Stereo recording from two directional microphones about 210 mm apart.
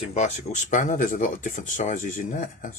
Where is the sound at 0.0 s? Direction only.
35° left (ahead or behind).